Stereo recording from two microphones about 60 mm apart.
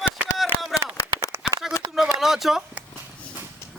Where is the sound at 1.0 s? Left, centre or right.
Left.